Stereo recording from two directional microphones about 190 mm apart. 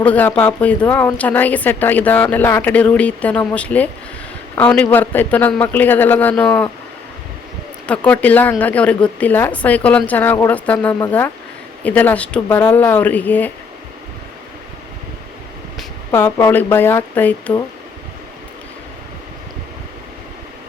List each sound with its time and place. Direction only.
0.0 s a woman's voice: 10° left (ahead or behind)
7.9 s a woman's voice: 5° left (ahead or behind)
16.1 s a woman's voice: 10° left (ahead or behind)